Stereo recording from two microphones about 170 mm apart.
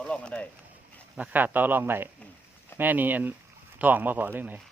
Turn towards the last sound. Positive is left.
turn(degrees=-10)  # may be behind; listen again after turning